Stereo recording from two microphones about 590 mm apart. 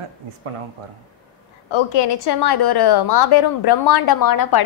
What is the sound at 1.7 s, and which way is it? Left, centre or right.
A woman's voice, left.